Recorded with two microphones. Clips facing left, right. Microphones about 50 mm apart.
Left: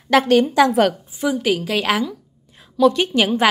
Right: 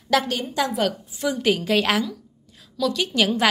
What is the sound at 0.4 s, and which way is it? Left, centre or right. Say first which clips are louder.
Speech: left 9 dB; left.